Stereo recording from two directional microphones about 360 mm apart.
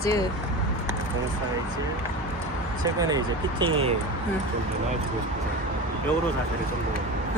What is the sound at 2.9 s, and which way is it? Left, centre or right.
Speech, centre.